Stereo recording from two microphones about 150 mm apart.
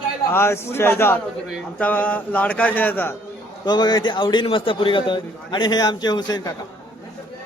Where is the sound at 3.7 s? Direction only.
30° left (ahead or behind).